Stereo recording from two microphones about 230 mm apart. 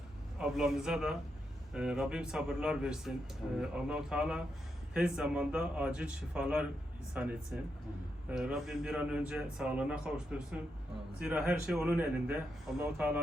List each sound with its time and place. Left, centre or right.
0.3 s a man's voice: centre